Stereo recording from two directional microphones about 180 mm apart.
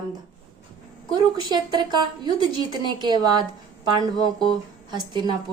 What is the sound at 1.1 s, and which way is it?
Speech, 25° right (ahead or behind).